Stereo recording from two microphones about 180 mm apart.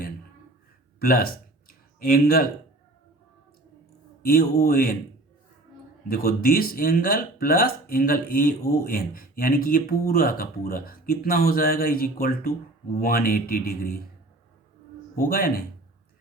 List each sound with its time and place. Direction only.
0.9 s speech: 55° left (ahead or behind)
4.2 s speech: 55° left (ahead or behind)
6.1 s speech: 55° left (ahead or behind)
15.1 s speech: 55° left (ahead or behind)